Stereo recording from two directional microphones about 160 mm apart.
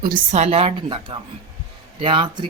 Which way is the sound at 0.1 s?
50° right (ahead or behind).